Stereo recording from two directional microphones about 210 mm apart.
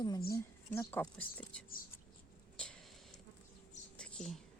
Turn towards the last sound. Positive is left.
turn(degrees=0)  # may be behind; listen again after turning